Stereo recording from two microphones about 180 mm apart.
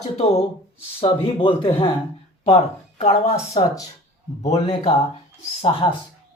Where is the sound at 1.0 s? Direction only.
30° left (ahead or behind).